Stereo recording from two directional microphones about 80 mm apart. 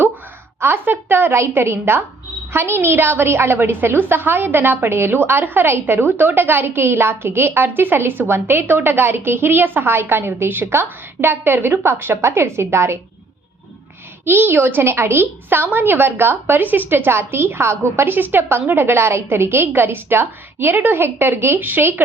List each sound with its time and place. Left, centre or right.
0.6 s a woman's voice: right
14.3 s a woman's voice: right